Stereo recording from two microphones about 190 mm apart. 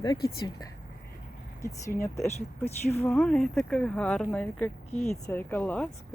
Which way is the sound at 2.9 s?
10° left (ahead or behind).